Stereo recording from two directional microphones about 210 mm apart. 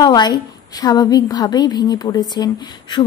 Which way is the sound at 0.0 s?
20° left (ahead or behind).